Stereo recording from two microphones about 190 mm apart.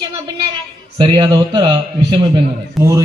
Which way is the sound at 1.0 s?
25° right (ahead or behind).